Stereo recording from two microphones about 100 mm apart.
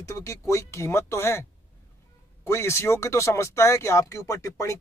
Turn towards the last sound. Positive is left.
turn(degrees=30)  # may be behind; listen again after turning